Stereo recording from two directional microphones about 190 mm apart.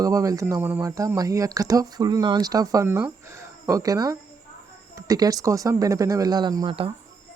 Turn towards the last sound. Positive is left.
turn(degrees=-25)  # may be behind; listen again after turning